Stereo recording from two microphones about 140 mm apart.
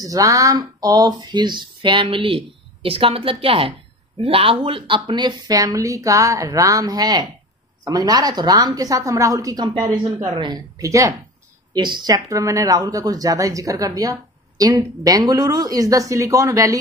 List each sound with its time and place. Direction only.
0.0 s speech: 25° right (ahead or behind)